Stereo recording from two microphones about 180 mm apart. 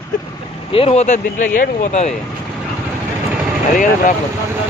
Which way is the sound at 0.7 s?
35° left (ahead or behind).